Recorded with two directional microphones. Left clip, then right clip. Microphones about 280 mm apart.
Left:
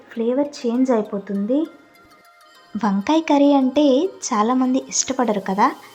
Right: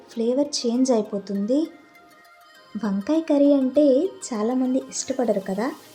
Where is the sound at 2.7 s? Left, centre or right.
Centre.